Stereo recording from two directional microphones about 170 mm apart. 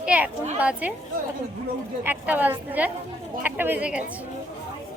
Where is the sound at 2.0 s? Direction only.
10° right (ahead or behind).